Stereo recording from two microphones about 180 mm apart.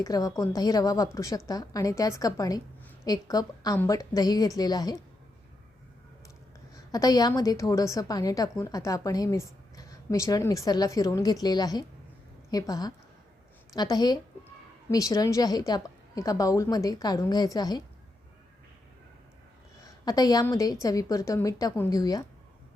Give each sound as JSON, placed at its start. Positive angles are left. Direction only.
{"t": 0.0, "sound": "a woman's voice", "side_deg": 20}
{"t": 6.9, "sound": "a woman's voice", "side_deg": 20}
{"t": 20.1, "sound": "a woman's voice", "side_deg": 20}